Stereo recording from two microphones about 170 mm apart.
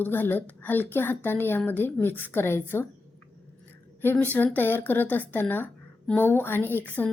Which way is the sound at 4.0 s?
10° left (ahead or behind).